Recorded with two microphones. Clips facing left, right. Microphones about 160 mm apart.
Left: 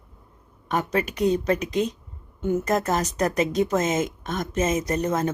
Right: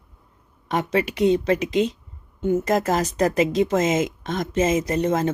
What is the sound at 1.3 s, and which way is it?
Speech, 90° right.